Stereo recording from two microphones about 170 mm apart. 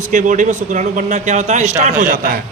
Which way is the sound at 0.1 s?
50° right (ahead or behind).